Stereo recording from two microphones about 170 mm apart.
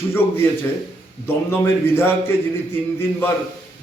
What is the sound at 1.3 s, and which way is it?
A man's voice, 15° left (ahead or behind).